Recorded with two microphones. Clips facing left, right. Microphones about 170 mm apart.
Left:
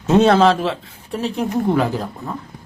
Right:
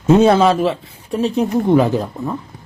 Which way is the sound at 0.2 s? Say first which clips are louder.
Right 1 dB; 5° right (ahead or behind).